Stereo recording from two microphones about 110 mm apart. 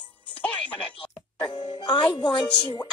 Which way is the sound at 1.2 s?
45° left (ahead or behind).